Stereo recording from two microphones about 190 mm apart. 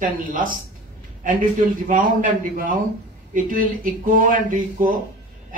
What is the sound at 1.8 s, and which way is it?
A man's voice, 45° right (ahead or behind).